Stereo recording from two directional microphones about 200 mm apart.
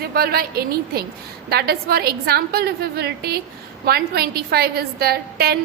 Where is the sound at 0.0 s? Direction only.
50° right (ahead or behind).